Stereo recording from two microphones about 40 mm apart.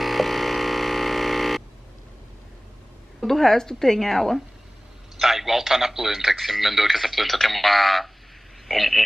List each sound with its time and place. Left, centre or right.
0.0 s a sound: centre
3.2 s a woman's voice: centre
5.2 s a man's voice: centre